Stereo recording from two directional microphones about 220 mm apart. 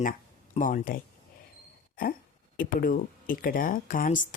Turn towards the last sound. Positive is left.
turn(degrees=35)  # may be behind; listen again after turning